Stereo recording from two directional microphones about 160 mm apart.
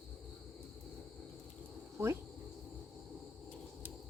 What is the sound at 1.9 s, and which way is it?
Insect, 15° right (ahead or behind).